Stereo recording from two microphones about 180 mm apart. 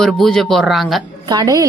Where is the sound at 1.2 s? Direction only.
20° right (ahead or behind).